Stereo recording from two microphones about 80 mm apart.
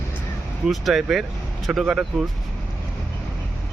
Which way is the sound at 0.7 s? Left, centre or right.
Centre.